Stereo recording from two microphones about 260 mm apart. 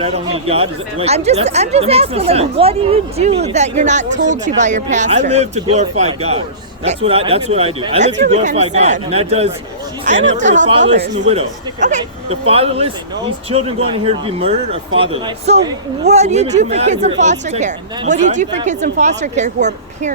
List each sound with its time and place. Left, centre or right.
0.0 s speech: right